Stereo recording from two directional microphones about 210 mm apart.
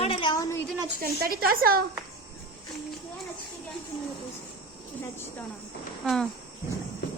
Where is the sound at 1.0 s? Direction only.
45° right (ahead or behind).